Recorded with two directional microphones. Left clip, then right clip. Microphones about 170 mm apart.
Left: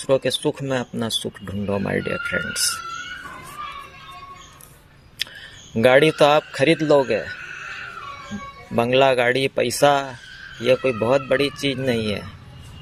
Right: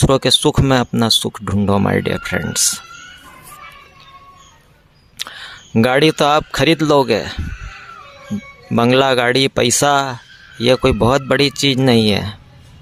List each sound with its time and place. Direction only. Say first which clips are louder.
0.1 s speech: right 4 dB; 40° right (ahead or behind)
5.1 s speech: right 2 dB; 40° right (ahead or behind)
8.7 s speech: right 4 dB; 40° right (ahead or behind)